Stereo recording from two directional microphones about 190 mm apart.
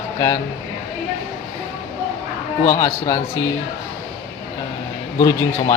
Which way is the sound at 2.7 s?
20° left (ahead or behind).